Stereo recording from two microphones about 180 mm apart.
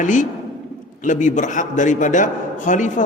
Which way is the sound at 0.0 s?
45° left (ahead or behind).